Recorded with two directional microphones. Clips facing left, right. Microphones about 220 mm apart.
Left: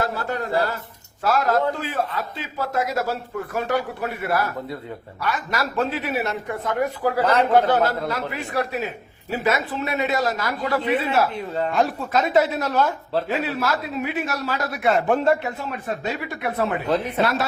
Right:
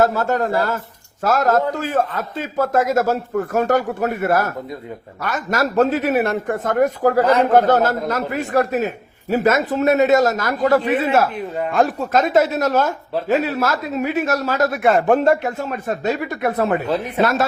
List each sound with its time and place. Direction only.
0.0 s speech: 45° right (ahead or behind)